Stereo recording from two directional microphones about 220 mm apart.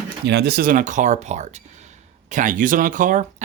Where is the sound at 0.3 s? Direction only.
50° right (ahead or behind).